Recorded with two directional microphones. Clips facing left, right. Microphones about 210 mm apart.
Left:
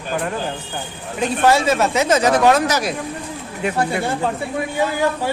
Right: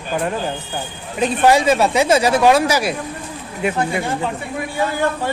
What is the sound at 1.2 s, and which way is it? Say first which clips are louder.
Speech: right 2 dB; 15° right (ahead or behind).